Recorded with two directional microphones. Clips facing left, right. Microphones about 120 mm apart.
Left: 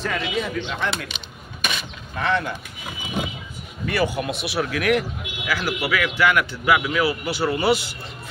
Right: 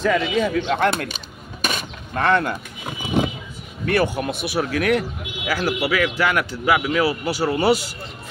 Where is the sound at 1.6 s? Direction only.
50° right (ahead or behind).